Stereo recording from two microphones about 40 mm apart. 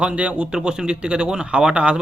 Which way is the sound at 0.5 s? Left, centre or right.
Centre.